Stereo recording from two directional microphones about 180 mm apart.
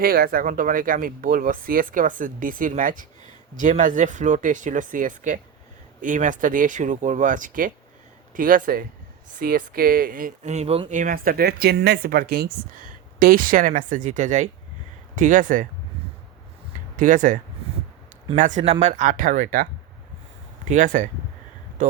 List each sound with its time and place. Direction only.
0.0 s speech: 55° right (ahead or behind)
17.0 s speech: 45° right (ahead or behind)
20.7 s speech: 45° right (ahead or behind)